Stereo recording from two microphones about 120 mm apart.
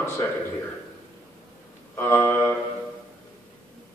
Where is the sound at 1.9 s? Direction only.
15° left (ahead or behind).